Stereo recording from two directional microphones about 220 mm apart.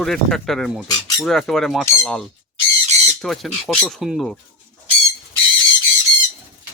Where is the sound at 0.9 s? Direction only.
15° left (ahead or behind).